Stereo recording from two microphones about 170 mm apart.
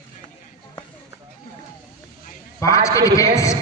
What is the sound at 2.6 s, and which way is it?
Speech, 20° left (ahead or behind).